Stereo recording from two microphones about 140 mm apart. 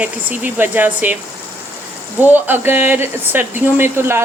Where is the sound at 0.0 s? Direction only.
10° right (ahead or behind).